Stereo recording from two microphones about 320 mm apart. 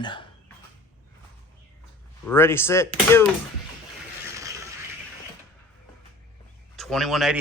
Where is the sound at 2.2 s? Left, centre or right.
Centre.